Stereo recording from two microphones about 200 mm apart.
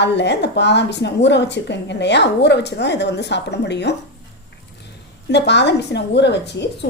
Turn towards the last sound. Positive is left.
turn(degrees=60)  # may be behind; listen again after turning